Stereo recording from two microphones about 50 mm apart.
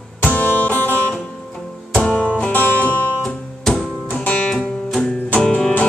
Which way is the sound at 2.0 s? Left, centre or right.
Centre.